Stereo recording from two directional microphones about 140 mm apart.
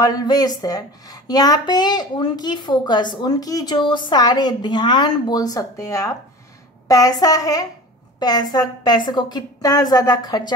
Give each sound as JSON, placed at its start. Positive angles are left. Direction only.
{"t": 0.0, "sound": "speech", "side_deg": 30}